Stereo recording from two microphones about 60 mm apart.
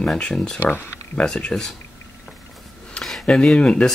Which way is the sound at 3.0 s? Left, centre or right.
Centre.